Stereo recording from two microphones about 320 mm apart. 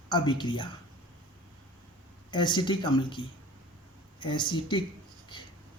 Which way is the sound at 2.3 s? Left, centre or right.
Centre.